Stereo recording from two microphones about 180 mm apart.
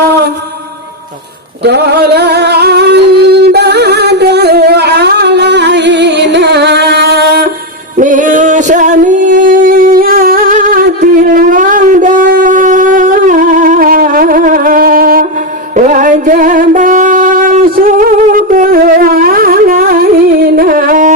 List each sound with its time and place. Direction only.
1.6 s a sound: 65° right (ahead or behind)
7.9 s singing: 45° right (ahead or behind)
15.7 s music: 45° right (ahead or behind)